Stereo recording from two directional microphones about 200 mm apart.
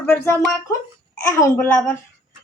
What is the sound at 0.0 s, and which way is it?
A woman's voice, 10° left (ahead or behind).